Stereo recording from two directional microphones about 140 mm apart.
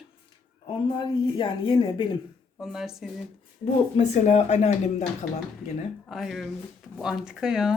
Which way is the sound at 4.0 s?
50° left (ahead or behind).